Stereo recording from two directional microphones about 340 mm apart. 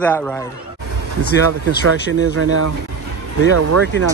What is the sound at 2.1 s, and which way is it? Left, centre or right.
Speech, right.